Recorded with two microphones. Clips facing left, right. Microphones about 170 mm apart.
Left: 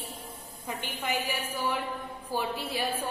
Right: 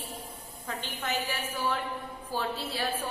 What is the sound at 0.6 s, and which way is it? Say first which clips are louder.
A woman's voice: left 1 dB; 10° left (ahead or behind).